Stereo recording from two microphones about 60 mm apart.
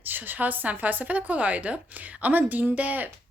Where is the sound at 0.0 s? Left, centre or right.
Right.